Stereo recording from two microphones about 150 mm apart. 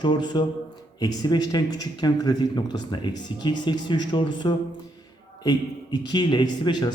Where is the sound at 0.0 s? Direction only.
30° left (ahead or behind).